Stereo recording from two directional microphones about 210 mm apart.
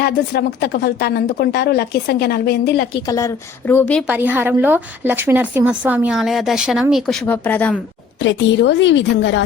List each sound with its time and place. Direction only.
0.0 s a woman's voice: 50° left (ahead or behind)
3.1 s a woman's voice: 15° left (ahead or behind)
4.0 s a woman's voice: 10° right (ahead or behind)
8.2 s a woman's voice: 55° left (ahead or behind)